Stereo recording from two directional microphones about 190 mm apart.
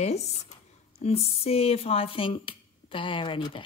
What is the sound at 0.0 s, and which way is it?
Speech, 35° left (ahead or behind).